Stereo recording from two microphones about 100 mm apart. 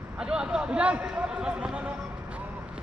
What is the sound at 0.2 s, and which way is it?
Speech, 10° right (ahead or behind).